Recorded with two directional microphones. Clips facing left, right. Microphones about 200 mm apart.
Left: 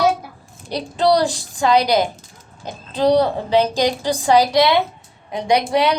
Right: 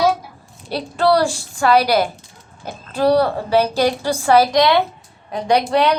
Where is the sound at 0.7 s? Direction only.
15° left (ahead or behind).